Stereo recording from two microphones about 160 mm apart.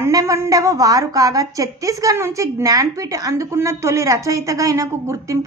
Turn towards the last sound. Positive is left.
turn(degrees=-20)  # may be behind; listen again after turning